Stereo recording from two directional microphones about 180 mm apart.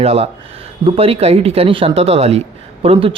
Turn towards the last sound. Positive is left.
turn(degrees=-30)  # may be behind; listen again after turning